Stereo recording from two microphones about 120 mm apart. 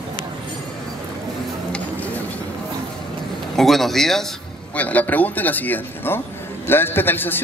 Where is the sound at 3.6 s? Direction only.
Centre (ahead or behind).